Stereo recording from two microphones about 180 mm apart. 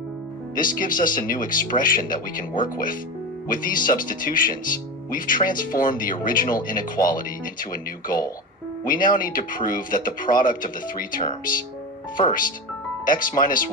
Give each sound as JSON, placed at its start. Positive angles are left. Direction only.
{"t": 0.6, "sound": "speech", "side_deg": 50}